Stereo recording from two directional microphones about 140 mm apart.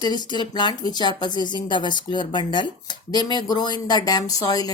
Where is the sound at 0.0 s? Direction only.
30° left (ahead or behind).